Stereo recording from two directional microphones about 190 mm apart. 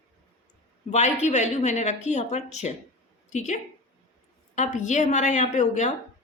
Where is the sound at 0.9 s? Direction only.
35° left (ahead or behind).